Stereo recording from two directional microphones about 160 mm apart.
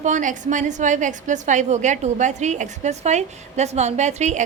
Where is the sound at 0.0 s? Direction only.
50° right (ahead or behind).